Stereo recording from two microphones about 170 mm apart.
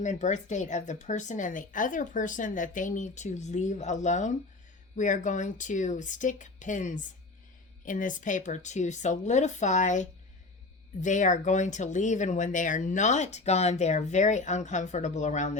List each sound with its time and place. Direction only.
0.0 s speech: 45° left (ahead or behind)